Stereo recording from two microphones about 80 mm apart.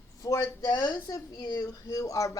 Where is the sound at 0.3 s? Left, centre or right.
Left.